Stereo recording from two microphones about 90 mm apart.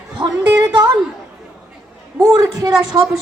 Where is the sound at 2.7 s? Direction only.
5° right (ahead or behind).